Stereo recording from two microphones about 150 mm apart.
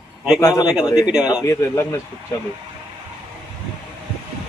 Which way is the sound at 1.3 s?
20° left (ahead or behind).